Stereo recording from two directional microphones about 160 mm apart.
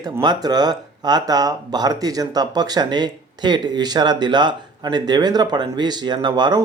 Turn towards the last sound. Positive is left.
turn(degrees=-25)  # may be behind; listen again after turning